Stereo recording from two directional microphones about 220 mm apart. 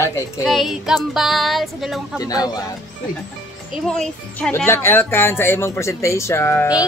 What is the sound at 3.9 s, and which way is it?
Speech, 5° left (ahead or behind).